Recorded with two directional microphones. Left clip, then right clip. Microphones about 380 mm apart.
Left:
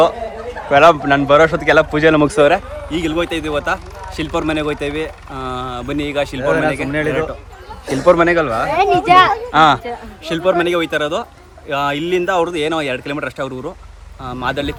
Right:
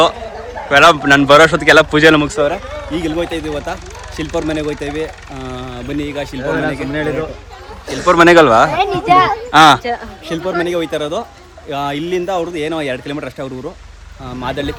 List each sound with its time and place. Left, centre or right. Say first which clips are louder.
0.7 s speech: right 2 dB; centre
2.3 s speech: left 4 dB; left
2.9 s speech: even; centre
6.5 s speech: left 2 dB; left
8.0 s a man's voice: right 5 dB; centre
8.7 s a child's voice: left 1 dB; left
9.5 s speech: right 4 dB; centre